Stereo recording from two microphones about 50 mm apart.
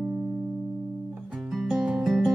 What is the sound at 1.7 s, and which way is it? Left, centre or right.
Music, centre.